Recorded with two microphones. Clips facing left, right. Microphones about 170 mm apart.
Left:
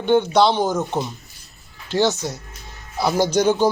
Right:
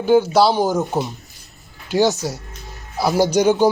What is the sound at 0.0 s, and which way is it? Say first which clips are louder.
Speech: right 2 dB; 5° right (ahead or behind).